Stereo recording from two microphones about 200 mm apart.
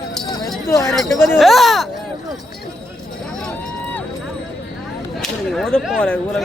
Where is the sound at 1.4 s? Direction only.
Centre (ahead or behind).